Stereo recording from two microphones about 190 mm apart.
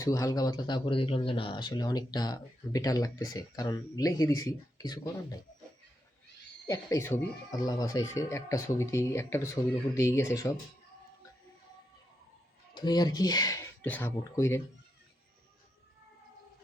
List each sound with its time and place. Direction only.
0.0 s speech: 15° left (ahead or behind)
6.7 s speech: 15° left (ahead or behind)
12.7 s speech: 20° left (ahead or behind)